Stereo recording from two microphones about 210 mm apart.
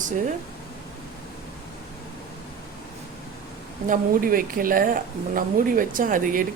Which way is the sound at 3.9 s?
40° right (ahead or behind).